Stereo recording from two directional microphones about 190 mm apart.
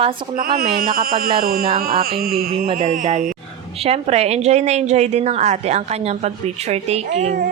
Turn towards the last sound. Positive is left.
turn(degrees=-35)  # may be behind; listen again after turning